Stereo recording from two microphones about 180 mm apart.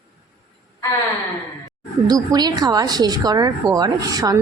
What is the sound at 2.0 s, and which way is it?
A woman's voice, 20° right (ahead or behind).